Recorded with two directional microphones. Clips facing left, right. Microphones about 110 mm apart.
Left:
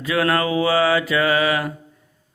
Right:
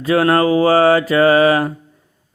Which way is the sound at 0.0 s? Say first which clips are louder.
Right 6 dB; 35° right (ahead or behind).